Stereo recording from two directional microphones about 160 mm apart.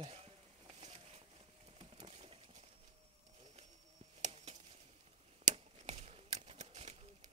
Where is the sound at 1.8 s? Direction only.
35° right (ahead or behind).